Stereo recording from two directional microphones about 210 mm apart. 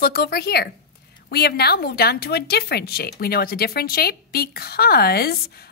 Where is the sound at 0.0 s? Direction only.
45° left (ahead or behind).